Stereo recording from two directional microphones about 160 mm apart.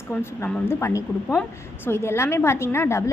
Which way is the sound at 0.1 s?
10° left (ahead or behind).